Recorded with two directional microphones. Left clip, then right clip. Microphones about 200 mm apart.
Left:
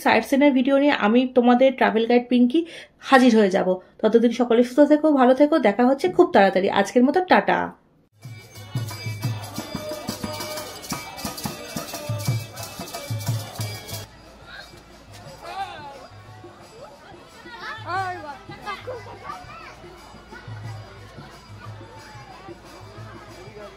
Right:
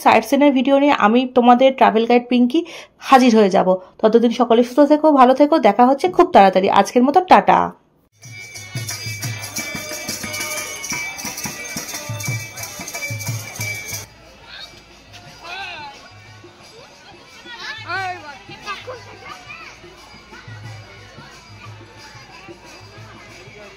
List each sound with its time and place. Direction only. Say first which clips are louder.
0.0 s speech: right 5 dB; 20° right (ahead or behind)
10.0 s music: right 5 dB; 50° left (ahead or behind)
17.8 s children playing: right 2 dB; 50° left (ahead or behind)